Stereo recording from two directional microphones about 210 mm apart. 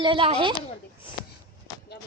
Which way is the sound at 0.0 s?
25° right (ahead or behind).